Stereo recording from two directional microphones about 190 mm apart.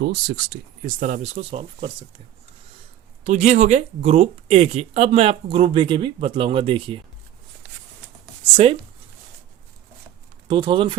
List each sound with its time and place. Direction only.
0.0 s speech: 60° right (ahead or behind); by 2.2 s 30° right (ahead or behind)
3.2 s speech: 40° right (ahead or behind)
8.5 s speech: 30° right (ahead or behind)
10.5 s speech: 25° right (ahead or behind)